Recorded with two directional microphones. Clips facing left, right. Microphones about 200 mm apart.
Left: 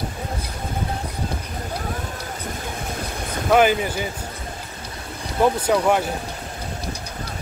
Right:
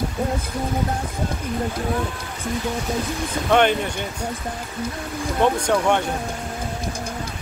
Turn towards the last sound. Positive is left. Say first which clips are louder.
# left 1 dB
turn(degrees=5)  # may be behind; listen again after turning